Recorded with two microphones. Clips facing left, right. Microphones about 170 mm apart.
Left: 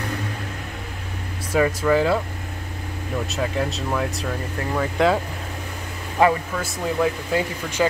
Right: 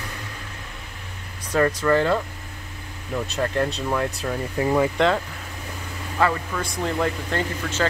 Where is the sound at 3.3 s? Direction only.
Centre (ahead or behind).